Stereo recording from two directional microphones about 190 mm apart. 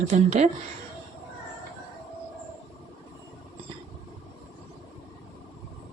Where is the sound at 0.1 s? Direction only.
35° right (ahead or behind).